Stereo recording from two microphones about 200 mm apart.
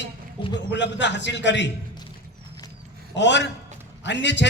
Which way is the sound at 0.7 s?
60° left (ahead or behind).